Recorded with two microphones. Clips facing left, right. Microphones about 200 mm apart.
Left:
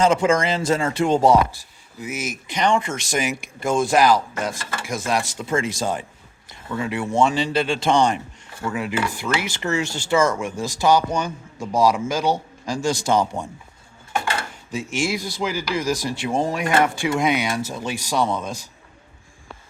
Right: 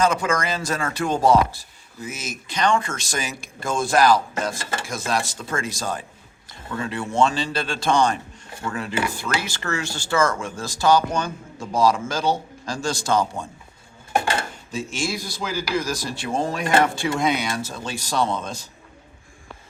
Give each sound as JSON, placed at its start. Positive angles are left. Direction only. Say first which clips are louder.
{"t": 0.0, "sound": "speech", "louder": "left 4 dB", "side_deg": 25}
{"t": 4.5, "sound": "speech", "louder": "right 2 dB", "side_deg": -25}
{"t": 4.9, "sound": "speech", "louder": "left 3 dB", "side_deg": 20}
{"t": 14.7, "sound": "speech", "louder": "left 4 dB", "side_deg": 15}